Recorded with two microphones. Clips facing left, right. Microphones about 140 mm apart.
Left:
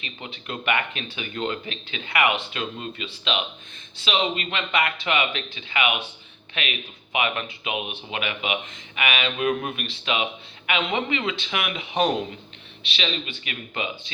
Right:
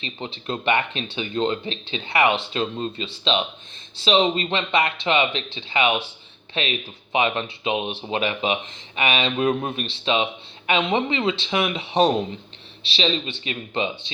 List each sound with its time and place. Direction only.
0.0 s speech: 30° right (ahead or behind)